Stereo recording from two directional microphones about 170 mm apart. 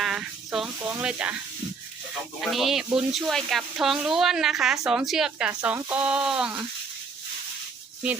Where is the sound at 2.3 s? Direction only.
Centre (ahead or behind).